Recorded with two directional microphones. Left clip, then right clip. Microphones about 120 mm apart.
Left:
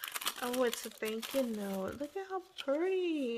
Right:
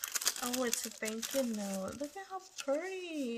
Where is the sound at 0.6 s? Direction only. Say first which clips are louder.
Left 3 dB; 35° left (ahead or behind).